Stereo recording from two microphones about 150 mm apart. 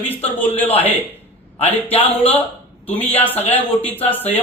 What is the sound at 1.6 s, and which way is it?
Speech, 40° left (ahead or behind).